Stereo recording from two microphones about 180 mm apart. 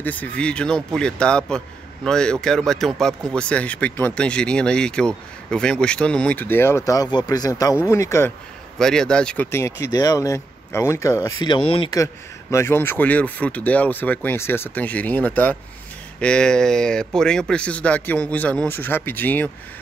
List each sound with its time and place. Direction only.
0.0 s speech: 10° left (ahead or behind)
8.7 s speech: 5° left (ahead or behind)